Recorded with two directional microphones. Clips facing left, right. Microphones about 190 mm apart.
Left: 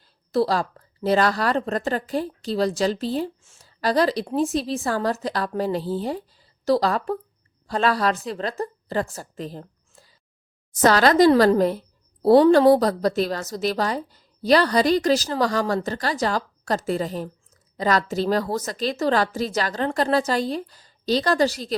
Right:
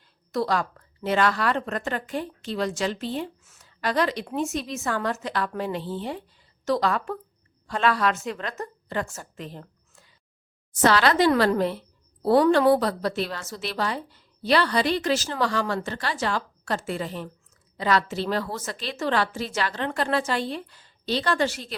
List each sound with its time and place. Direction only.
0.0 s a woman's voice: 30° left (ahead or behind)